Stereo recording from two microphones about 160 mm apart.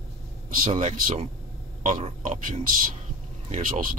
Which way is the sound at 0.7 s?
50° right (ahead or behind).